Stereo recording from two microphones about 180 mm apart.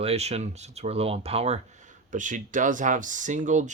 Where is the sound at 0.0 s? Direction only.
35° right (ahead or behind).